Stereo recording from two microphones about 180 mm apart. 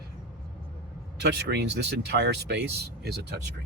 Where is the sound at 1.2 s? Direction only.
70° right (ahead or behind).